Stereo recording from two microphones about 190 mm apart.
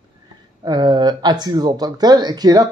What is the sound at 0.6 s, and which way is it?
Speech, 20° right (ahead or behind).